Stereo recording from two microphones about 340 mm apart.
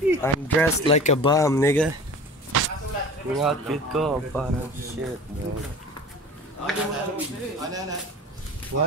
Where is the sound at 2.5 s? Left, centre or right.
Right.